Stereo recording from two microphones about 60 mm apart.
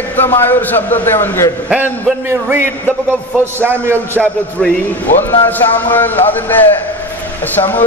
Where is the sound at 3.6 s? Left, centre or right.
Right.